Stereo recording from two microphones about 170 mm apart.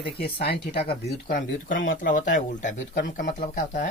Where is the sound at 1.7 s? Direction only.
90° left.